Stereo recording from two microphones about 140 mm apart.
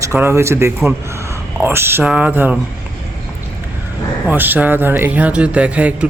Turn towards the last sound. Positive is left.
turn(degrees=-10)  # may be behind; listen again after turning